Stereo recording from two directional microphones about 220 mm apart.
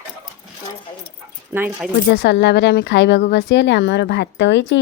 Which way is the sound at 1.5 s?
10° right (ahead or behind).